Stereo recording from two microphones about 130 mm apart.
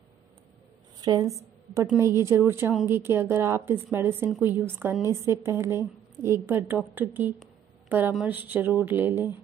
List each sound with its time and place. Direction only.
1.0 s a woman's voice: 30° right (ahead or behind)